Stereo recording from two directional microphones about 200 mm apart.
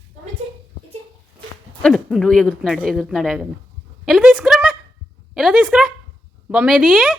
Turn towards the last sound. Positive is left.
turn(degrees=-5)  # may be behind; listen again after turning